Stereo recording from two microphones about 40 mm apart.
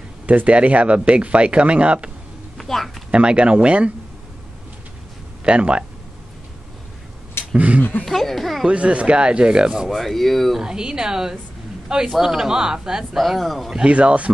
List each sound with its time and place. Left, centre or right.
0.3 s speech: right
2.5 s a sound: centre
3.1 s speech: right
5.4 s speech: right
7.5 s speech: right
8.0 s a child's voice: centre
8.6 s speech: right
9.8 s a child's voice: centre
10.6 s a man's voice: centre
13.2 s a child's voice: centre
13.8 s speech: right